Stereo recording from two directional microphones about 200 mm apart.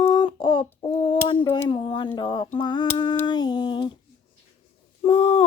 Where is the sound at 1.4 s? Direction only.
25° left (ahead or behind).